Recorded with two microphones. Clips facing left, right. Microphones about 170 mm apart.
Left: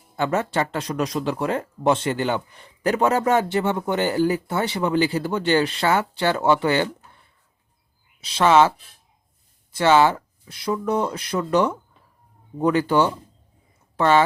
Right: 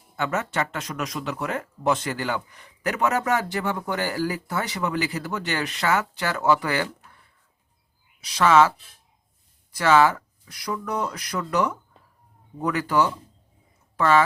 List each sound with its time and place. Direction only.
0.2 s speech: 30° left (ahead or behind)
9.7 s speech: 25° left (ahead or behind)